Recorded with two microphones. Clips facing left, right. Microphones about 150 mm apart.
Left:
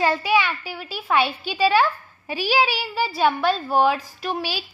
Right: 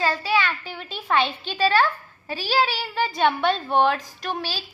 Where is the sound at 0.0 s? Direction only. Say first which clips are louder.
Left 3 dB; 15° left (ahead or behind).